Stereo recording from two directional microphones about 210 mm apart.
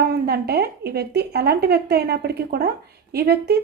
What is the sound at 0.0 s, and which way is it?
Speech, 50° right (ahead or behind).